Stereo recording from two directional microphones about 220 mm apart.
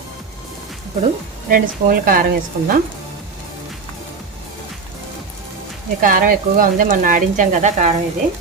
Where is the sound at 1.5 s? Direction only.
40° right (ahead or behind).